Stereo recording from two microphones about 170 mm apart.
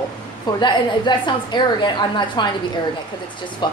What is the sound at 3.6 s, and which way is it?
Speech, 25° left (ahead or behind).